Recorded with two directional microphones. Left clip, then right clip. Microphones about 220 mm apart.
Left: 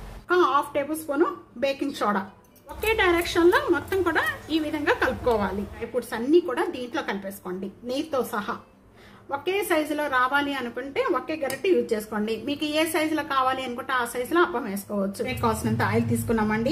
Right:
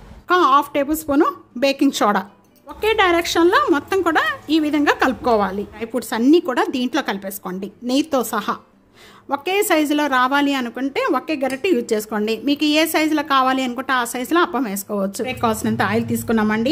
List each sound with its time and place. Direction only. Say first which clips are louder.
0.3 s a woman's voice: right 7 dB; 40° right (ahead or behind)
15.2 s a woman's voice: right 5 dB; 35° right (ahead or behind)